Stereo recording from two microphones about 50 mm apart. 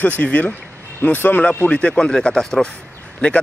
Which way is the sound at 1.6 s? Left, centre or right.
Left.